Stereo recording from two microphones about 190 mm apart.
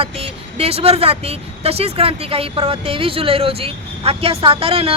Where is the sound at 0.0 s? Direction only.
30° right (ahead or behind).